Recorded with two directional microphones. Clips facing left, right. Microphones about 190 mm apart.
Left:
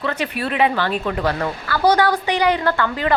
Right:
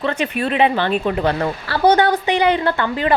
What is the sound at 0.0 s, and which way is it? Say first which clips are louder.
Speech: right 3 dB; 25° right (ahead or behind).